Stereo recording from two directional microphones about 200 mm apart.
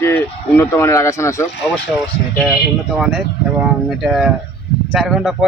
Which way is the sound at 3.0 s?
Centre (ahead or behind).